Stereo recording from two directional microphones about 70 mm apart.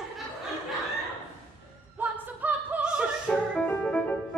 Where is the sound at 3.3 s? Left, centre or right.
Centre.